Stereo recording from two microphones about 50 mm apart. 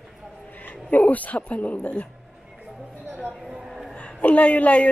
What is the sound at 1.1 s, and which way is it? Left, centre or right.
Speech, left.